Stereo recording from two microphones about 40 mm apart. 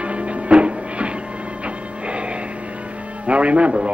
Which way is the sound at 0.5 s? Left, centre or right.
Right.